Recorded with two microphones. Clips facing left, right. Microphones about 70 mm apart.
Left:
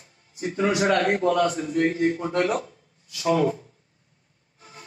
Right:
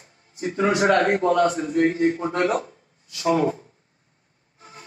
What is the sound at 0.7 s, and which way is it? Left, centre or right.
A man's voice, right.